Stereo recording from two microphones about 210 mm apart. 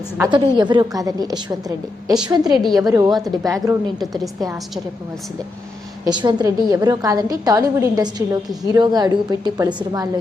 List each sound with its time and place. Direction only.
0.2 s a woman's voice: 20° right (ahead or behind)
6.1 s a woman's voice: 20° right (ahead or behind)